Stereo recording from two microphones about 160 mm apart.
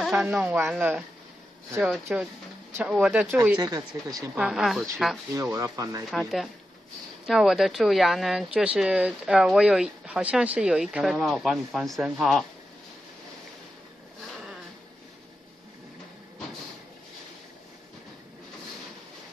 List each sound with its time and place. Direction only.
0.0 s speech: centre (ahead or behind)
0.7 s speech: 10° right (ahead or behind)
2.1 s speech: 5° right (ahead or behind)
3.5 s speech: 25° right (ahead or behind)
4.4 s speech: 5° right (ahead or behind)
5.3 s speech: 20° right (ahead or behind)
6.0 s speech: centre (ahead or behind)
14.3 s a sound: centre (ahead or behind)